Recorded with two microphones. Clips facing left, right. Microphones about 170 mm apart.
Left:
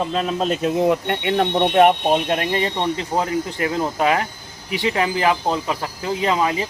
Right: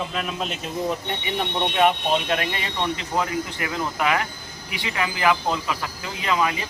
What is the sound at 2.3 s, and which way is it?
Speech, 35° left (ahead or behind).